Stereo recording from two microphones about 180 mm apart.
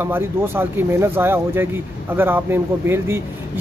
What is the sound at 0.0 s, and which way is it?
Speech, 10° right (ahead or behind).